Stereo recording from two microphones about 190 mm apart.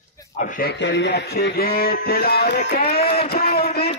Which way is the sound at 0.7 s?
65° left (ahead or behind).